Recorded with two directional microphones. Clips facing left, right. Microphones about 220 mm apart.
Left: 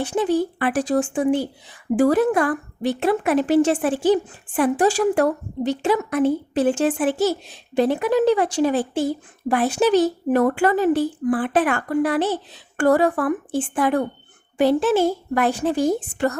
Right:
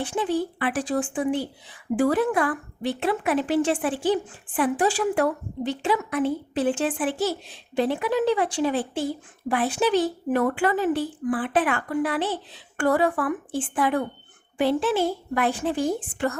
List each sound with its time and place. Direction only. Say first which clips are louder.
0.0 s a woman's voice: left 5 dB; 45° left (ahead or behind)